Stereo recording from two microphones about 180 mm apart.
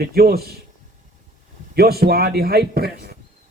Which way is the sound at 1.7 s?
60° right (ahead or behind).